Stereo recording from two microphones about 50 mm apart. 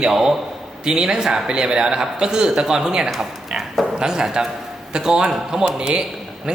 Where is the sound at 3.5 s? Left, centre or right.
Centre.